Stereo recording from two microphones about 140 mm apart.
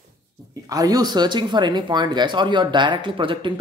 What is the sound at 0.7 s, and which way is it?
Speech, 25° right (ahead or behind).